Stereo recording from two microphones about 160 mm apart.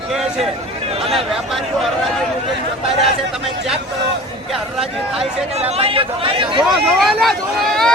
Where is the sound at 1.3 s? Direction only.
Centre (ahead or behind).